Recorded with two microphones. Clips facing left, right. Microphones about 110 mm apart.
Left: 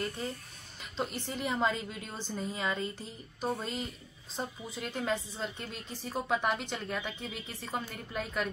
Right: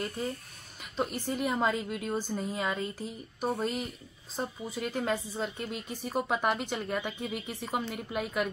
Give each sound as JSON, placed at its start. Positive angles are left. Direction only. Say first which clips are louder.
{"t": 0.9, "sound": "a woman's voice", "louder": "right 4 dB", "side_deg": -5}